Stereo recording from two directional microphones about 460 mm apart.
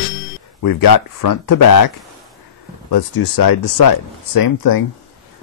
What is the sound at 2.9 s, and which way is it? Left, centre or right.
Speech, left.